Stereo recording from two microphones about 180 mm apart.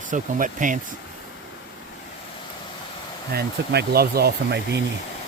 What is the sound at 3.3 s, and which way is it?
Speech, 65° right (ahead or behind).